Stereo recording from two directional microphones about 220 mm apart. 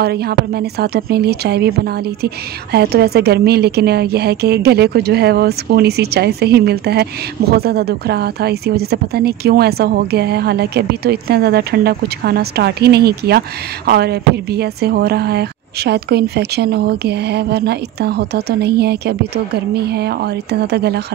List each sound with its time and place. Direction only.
0.0 s speech: 45° right (ahead or behind)